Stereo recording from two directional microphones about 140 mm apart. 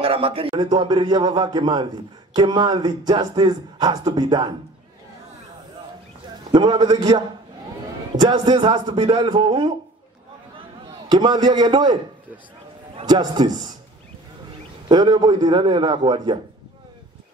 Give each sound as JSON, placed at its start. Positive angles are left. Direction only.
{"t": 0.0, "sound": "a man's voice", "side_deg": -40}
{"t": 6.5, "sound": "a man's voice", "side_deg": -35}
{"t": 8.2, "sound": "a man's voice", "side_deg": -30}
{"t": 11.1, "sound": "a man's voice", "side_deg": -30}
{"t": 13.0, "sound": "a man's voice", "side_deg": -30}
{"t": 14.9, "sound": "a man's voice", "side_deg": -30}